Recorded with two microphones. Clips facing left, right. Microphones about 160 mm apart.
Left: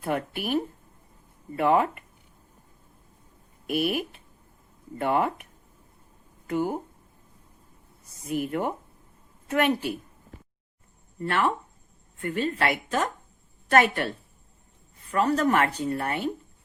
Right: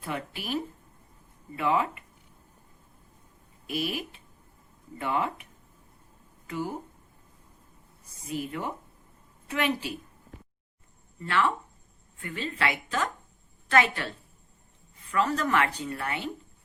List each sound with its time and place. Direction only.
0.0 s a woman's voice: 50° left (ahead or behind)
3.7 s a woman's voice: 55° left (ahead or behind)
6.5 s speech: 55° left (ahead or behind)
8.3 s a woman's voice: 55° left (ahead or behind)
11.2 s a woman's voice: 45° left (ahead or behind)
15.1 s speech: 40° left (ahead or behind)